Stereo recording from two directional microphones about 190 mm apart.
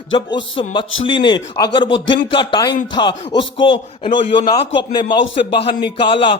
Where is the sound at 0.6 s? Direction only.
25° left (ahead or behind).